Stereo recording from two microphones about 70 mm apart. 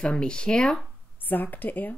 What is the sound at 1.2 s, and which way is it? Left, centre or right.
Speech, left.